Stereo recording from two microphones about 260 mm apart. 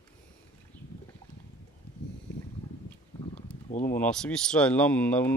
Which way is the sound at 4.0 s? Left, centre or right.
Centre.